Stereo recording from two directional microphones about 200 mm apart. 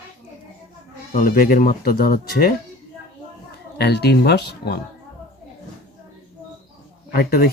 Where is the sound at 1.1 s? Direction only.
45° left (ahead or behind).